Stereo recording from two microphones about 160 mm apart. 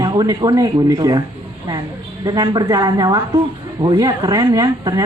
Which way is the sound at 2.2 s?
25° right (ahead or behind).